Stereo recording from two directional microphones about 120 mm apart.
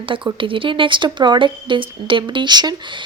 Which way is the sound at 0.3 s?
45° right (ahead or behind).